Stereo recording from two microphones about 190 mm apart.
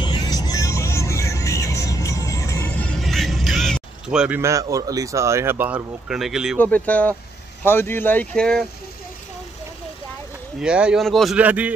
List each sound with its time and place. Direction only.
0.0 s music: 20° left (ahead or behind); by 4.4 s 5° right (ahead or behind)
4.4 s speech: 15° right (ahead or behind)
6.6 s speech: 10° left (ahead or behind)
10.6 s speech: 5° right (ahead or behind)